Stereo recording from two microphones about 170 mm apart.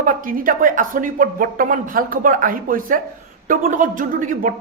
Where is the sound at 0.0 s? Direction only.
55° right (ahead or behind).